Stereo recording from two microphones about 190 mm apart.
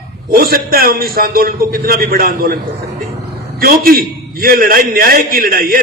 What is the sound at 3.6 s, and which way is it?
A man's voice, 50° right (ahead or behind).